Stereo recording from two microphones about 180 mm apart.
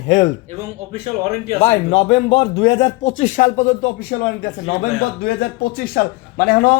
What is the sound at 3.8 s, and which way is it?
Speech, 65° left (ahead or behind).